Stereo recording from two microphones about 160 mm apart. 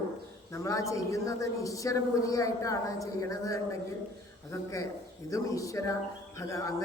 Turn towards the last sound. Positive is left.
turn(degrees=20)  # may be behind; listen again after turning